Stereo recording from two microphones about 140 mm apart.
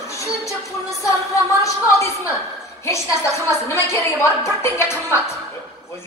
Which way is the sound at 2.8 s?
20° left (ahead or behind).